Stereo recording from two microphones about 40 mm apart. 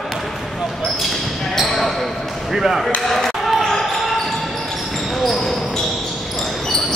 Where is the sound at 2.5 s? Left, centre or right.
Centre.